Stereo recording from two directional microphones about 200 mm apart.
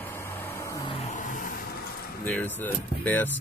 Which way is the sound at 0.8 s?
35° left (ahead or behind).